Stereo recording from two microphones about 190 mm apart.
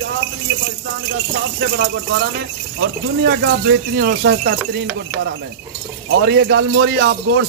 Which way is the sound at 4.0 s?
55° right (ahead or behind).